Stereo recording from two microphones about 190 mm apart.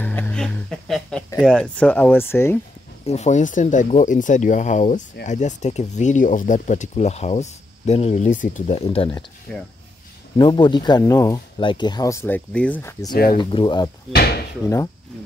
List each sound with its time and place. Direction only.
0.0 s music: 10° left (ahead or behind)
1.4 s speech: 5° left (ahead or behind)
3.1 s speech: 35° left (ahead or behind)
9.5 s speech: 5° left (ahead or behind)
10.3 s speech: 25° left (ahead or behind); by 12.9 s 5° left (ahead or behind)
13.1 s speech: 50° left (ahead or behind)
13.4 s speech: 25° left (ahead or behind)
14.1 s speech: 55° left (ahead or behind)